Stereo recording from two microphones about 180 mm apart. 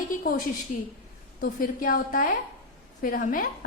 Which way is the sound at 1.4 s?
50° left (ahead or behind).